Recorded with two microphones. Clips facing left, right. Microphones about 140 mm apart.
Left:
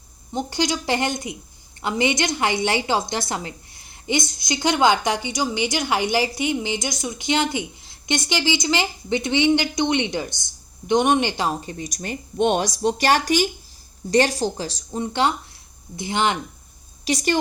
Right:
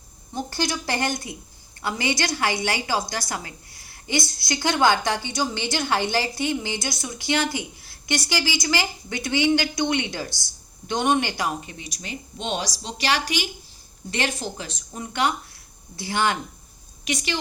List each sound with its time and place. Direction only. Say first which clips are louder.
0.3 s a woman's voice: left 4 dB; 20° left (ahead or behind)
17.1 s speech: left 6 dB; 35° left (ahead or behind)